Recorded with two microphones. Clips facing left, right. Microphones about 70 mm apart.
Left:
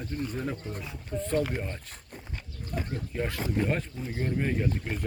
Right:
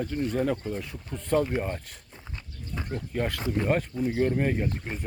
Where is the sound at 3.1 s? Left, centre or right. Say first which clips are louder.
Right 2 dB; right.